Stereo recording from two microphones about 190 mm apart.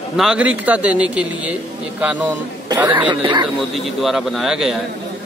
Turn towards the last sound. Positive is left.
turn(degrees=0)  # may be behind; listen again after turning